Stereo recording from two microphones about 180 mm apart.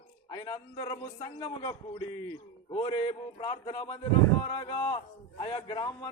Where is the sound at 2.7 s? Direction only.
30° left (ahead or behind).